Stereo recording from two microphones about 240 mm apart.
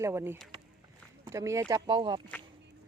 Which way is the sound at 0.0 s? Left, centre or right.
Centre.